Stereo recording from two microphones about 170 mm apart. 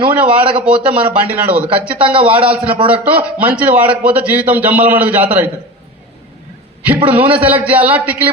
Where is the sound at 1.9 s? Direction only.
30° right (ahead or behind).